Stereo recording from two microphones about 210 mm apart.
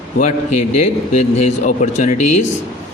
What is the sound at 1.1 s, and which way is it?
Speech, 30° left (ahead or behind).